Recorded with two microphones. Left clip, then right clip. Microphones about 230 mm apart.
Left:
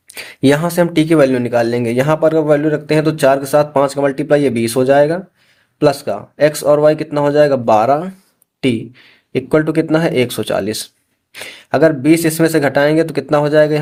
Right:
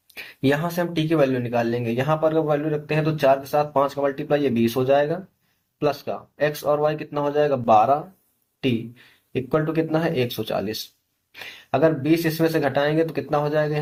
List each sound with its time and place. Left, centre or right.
0.1 s speech: left
9.3 s speech: left